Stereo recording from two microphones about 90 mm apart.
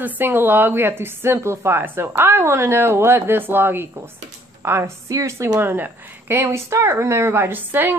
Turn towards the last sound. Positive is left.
turn(degrees=-25)  # may be behind; listen again after turning